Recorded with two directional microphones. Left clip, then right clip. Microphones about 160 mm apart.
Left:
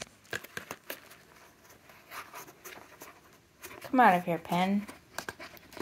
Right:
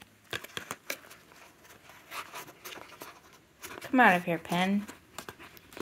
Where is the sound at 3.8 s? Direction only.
10° right (ahead or behind).